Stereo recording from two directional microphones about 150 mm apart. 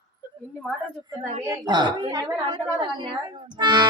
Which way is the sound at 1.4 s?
30° right (ahead or behind).